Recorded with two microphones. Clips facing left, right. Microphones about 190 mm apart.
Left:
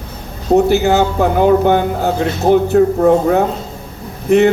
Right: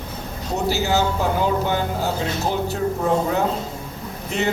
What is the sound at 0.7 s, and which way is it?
A man's voice, 60° left (ahead or behind).